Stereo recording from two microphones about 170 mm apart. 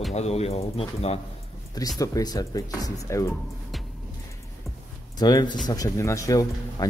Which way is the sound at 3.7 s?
Centre (ahead or behind).